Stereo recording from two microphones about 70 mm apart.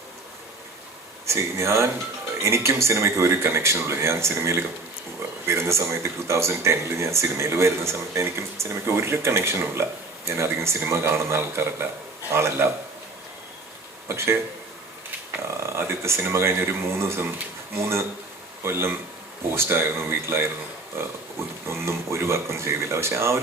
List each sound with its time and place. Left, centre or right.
1.3 s speech: right
14.1 s speech: right
15.4 s speech: right
18.6 s speech: right
21.7 s speech: right